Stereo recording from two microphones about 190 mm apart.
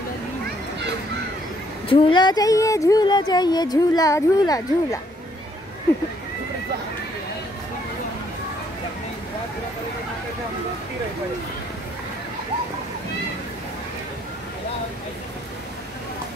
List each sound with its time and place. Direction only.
1.9 s speech: 30° left (ahead or behind)